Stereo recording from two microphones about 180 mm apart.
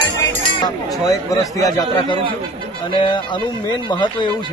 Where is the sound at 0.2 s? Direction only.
20° left (ahead or behind).